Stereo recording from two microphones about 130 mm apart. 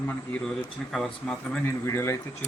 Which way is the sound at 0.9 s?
5° left (ahead or behind).